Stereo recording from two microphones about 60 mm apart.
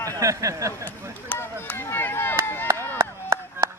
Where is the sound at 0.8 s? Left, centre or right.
Left.